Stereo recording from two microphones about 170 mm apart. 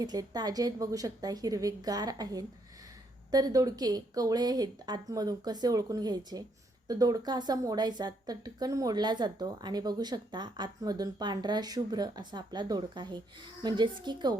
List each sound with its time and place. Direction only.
0.0 s a woman's voice: 25° right (ahead or behind)